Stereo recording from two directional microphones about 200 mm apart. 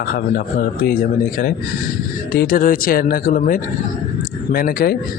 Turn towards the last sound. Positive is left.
turn(degrees=50)  # may be behind; listen again after turning